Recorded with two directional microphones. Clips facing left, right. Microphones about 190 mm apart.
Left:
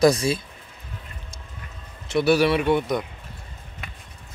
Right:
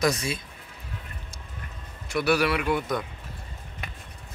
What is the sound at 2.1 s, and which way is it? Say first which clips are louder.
Speech: left 5 dB; 25° left (ahead or behind).